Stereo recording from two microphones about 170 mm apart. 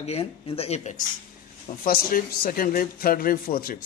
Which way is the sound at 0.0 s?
35° left (ahead or behind).